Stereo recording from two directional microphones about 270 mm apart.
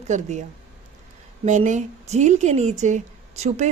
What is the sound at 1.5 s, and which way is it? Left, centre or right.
A woman's voice, right.